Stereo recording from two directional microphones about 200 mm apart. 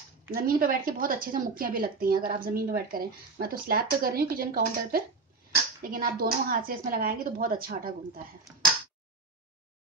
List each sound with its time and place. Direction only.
0.3 s a woman's voice: 45° right (ahead or behind)